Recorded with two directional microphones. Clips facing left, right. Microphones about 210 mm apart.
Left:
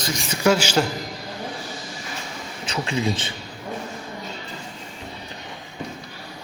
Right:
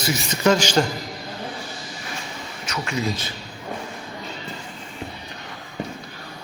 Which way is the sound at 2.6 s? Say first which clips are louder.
Left 2 dB; 30° left (ahead or behind).